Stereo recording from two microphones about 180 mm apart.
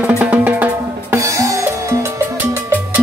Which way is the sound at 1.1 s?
15° right (ahead or behind).